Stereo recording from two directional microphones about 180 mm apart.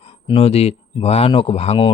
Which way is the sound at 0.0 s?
35° left (ahead or behind).